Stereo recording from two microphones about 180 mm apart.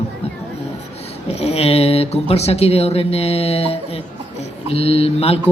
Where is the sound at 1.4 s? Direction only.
35° left (ahead or behind).